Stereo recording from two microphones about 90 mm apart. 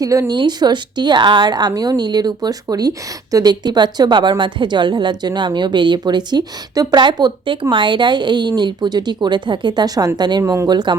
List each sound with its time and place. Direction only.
0.0 s speech: 35° right (ahead or behind)
0.3 s a woman's voice: 55° right (ahead or behind)
10.4 s speech: 35° right (ahead or behind)
10.7 s a woman's voice: 50° right (ahead or behind)